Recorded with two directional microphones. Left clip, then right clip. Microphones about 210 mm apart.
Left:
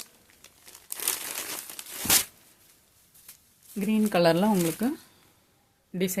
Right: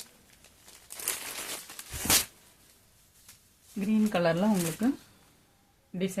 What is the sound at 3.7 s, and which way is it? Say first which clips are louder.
Speech: left 4 dB; 55° left (ahead or behind).